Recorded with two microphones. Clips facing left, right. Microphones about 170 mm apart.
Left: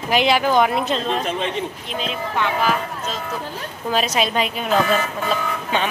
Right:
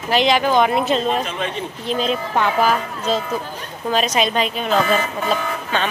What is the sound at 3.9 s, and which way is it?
Speech, 5° left (ahead or behind).